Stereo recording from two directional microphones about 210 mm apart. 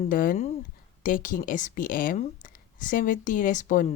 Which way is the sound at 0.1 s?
40° left (ahead or behind).